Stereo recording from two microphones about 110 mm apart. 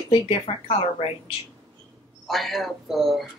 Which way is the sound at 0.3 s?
65° left (ahead or behind).